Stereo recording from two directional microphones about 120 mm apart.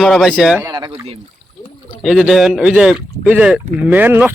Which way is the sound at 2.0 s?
5° right (ahead or behind).